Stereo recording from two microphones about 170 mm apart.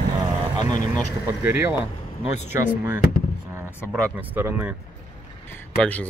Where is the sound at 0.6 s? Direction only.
25° right (ahead or behind).